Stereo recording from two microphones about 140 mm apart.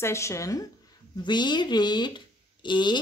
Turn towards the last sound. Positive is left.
turn(degrees=35)  # may be behind; listen again after turning